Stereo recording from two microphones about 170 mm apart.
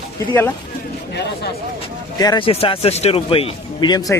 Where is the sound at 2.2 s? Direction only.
25° left (ahead or behind).